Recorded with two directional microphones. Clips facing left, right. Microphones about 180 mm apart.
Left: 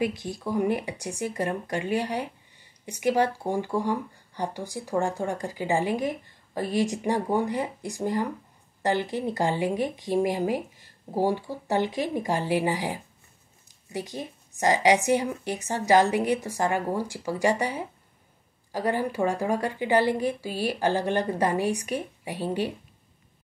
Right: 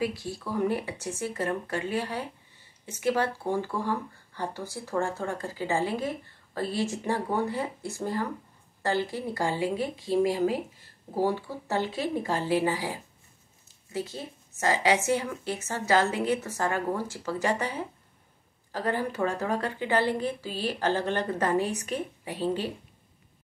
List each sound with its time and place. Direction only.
0.0 s speech: 20° left (ahead or behind)